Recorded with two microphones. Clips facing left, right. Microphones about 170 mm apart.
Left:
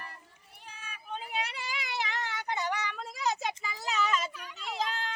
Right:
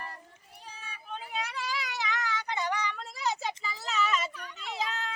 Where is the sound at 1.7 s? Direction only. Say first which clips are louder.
Even; 20° left (ahead or behind).